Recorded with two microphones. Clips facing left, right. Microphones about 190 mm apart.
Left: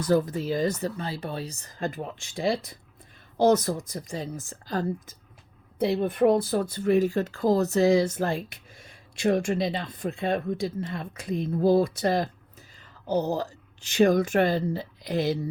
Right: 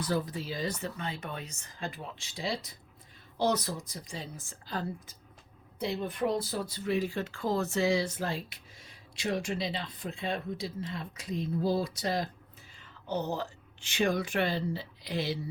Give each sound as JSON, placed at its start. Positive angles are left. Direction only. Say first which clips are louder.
{"t": 0.0, "sound": "speech", "louder": "left 8 dB", "side_deg": 45}
{"t": 5.8, "sound": "speech", "louder": "left 9 dB", "side_deg": 55}
{"t": 12.8, "sound": "speech", "louder": "left 7 dB", "side_deg": 35}